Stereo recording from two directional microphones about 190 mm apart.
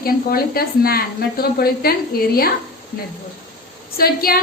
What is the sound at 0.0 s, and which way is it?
A woman's voice, 50° left (ahead or behind).